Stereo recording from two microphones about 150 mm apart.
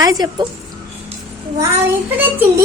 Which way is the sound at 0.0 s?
25° right (ahead or behind).